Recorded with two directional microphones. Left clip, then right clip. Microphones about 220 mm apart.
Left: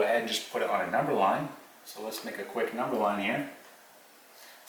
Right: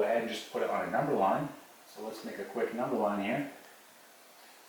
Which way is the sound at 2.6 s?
15° right (ahead or behind).